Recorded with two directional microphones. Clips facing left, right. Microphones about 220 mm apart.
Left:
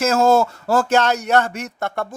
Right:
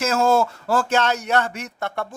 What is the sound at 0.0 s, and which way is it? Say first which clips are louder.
Speech: left 3 dB; 40° left (ahead or behind).